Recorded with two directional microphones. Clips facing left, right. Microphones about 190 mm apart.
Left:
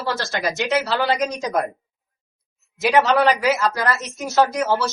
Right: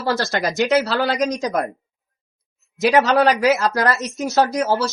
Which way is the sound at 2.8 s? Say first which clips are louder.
Right 2 dB; 45° right (ahead or behind).